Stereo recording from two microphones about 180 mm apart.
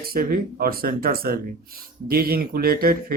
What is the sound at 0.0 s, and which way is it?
Speech, 55° right (ahead or behind).